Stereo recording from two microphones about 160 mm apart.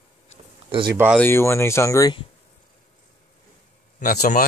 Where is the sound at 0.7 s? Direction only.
30° right (ahead or behind).